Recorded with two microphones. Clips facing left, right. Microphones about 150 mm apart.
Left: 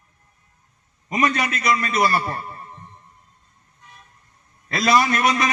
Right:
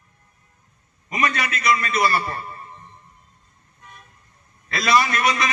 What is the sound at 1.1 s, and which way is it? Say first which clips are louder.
A man's voice: left 3 dB; 35° left (ahead or behind).